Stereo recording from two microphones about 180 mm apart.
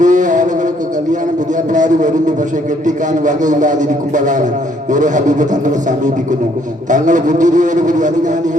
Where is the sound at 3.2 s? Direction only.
45° right (ahead or behind).